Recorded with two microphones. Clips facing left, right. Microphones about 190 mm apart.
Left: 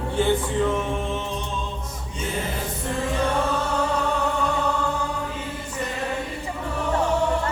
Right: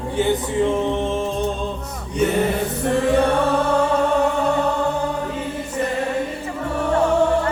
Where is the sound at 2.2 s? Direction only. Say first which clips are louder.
Right 10 dB; 70° right (ahead or behind).